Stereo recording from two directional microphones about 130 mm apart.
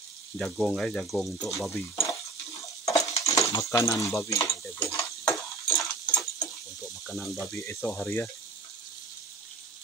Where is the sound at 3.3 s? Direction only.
25° left (ahead or behind).